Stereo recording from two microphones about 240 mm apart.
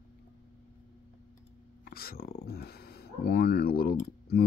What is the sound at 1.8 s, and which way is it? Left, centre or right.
Speech, left.